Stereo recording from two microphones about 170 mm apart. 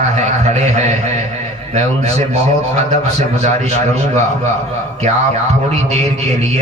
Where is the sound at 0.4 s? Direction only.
40° right (ahead or behind).